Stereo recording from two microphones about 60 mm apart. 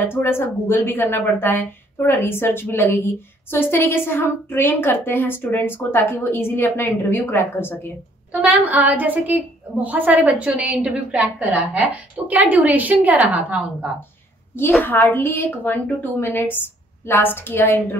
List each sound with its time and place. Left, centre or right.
0.1 s speech: left
8.3 s a woman's voice: right
14.8 s speech: left